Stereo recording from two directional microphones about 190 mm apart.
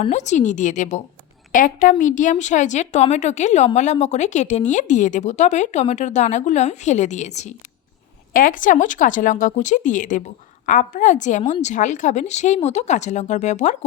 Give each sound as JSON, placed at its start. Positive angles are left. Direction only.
{"t": 0.0, "sound": "a woman's voice", "side_deg": 40}